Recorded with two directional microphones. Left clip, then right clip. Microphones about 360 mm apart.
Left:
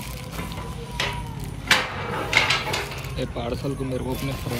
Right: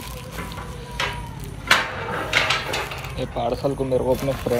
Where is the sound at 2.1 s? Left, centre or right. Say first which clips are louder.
Even; centre.